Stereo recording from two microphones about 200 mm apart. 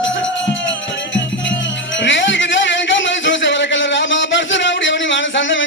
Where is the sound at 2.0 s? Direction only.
65° left (ahead or behind).